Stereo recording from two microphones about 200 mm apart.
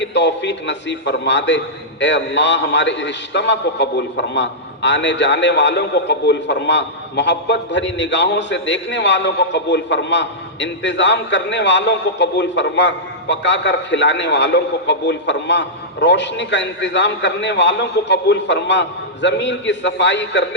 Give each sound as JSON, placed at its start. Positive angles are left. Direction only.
{"t": 0.0, "sound": "a man's voice", "side_deg": 60}